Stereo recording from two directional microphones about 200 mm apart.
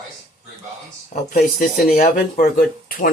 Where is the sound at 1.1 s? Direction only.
45° left (ahead or behind).